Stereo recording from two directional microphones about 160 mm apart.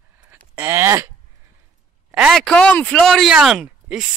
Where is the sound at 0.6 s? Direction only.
15° right (ahead or behind).